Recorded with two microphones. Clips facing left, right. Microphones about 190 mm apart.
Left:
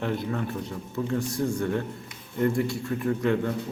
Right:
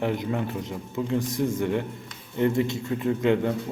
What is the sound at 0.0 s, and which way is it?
A man's voice, 15° right (ahead or behind).